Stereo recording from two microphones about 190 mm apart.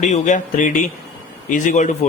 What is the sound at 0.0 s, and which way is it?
A man's voice, 40° left (ahead or behind).